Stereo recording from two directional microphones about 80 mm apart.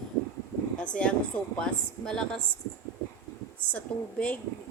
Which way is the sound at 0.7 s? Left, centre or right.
Centre.